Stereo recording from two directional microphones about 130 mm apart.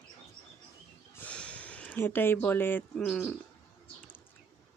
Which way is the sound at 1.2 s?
10° left (ahead or behind).